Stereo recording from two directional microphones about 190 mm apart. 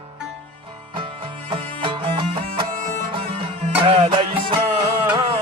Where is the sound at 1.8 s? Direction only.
25° right (ahead or behind).